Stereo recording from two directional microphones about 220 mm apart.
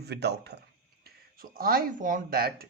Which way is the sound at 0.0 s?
50° right (ahead or behind).